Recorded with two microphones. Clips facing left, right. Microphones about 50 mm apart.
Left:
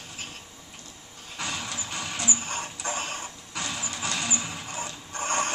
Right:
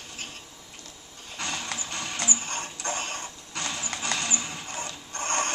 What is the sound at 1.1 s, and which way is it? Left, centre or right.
Vehicle, centre.